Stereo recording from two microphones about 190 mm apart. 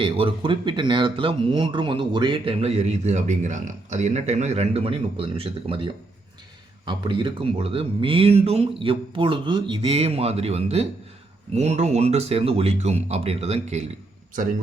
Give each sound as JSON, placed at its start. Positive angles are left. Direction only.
{"t": 0.0, "sound": "speech", "side_deg": -30}